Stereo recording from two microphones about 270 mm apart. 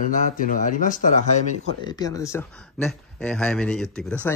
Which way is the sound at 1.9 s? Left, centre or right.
Centre.